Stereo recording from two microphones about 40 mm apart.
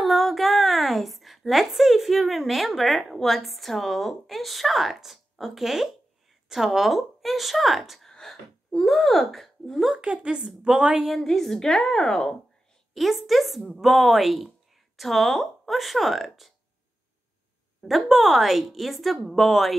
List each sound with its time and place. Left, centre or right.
0.0 s a woman's voice: centre
8.0 s a sound: centre
8.7 s speech: centre
9.9 s a woman's voice: right
11.1 s a woman's voice: centre
12.9 s speech: centre
17.8 s speech: centre